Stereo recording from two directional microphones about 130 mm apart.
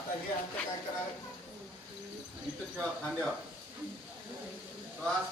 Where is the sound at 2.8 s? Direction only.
10° left (ahead or behind).